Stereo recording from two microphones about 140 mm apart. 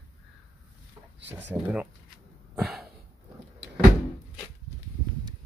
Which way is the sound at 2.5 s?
5° right (ahead or behind).